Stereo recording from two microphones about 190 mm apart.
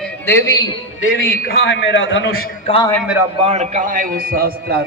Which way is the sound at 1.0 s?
50° left (ahead or behind).